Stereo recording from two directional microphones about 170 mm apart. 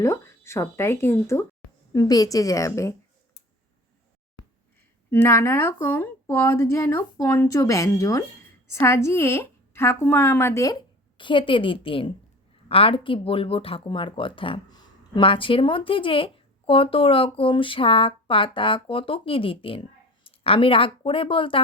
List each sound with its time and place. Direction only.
0.0 s a woman's voice: 15° left (ahead or behind)
5.1 s a woman's voice: 15° left (ahead or behind); by 21.6 s 30° left (ahead or behind)